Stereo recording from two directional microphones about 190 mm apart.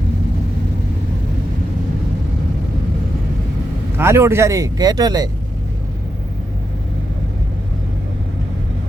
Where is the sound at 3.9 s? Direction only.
15° right (ahead or behind).